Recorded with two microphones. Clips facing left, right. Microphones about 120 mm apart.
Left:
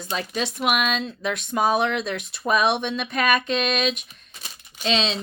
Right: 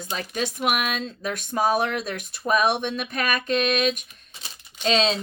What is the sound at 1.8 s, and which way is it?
Speech, 45° right (ahead or behind).